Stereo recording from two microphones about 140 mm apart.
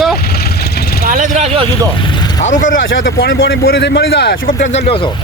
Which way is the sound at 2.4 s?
65° left (ahead or behind).